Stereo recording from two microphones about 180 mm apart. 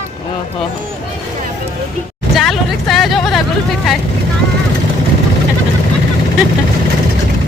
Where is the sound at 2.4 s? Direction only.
Centre (ahead or behind).